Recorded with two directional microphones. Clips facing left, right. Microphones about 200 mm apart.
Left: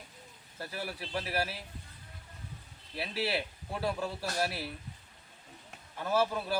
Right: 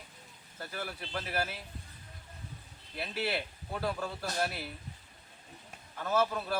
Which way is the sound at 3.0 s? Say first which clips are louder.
Left 1 dB; 5° left (ahead or behind).